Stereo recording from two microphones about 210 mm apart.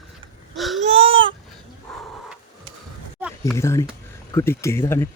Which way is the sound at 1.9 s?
Centre (ahead or behind).